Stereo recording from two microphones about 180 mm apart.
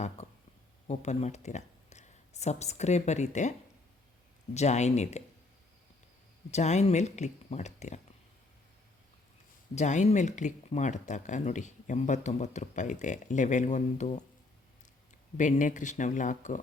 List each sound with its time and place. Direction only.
0.9 s speech: 40° left (ahead or behind)
4.5 s speech: 40° left (ahead or behind)
6.5 s speech: 40° left (ahead or behind)
9.7 s speech: 40° left (ahead or behind)
15.4 s speech: 45° left (ahead or behind)